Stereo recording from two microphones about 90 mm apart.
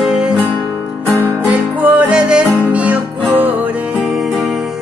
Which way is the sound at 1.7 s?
15° right (ahead or behind).